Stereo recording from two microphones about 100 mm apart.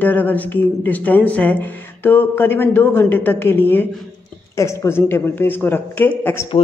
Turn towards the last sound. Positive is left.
turn(degrees=20)  # may be behind; listen again after turning